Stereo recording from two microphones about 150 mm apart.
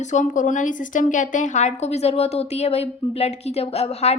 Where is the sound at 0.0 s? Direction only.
55° left (ahead or behind).